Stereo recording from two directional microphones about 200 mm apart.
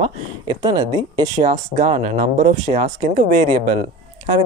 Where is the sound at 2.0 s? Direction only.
40° right (ahead or behind).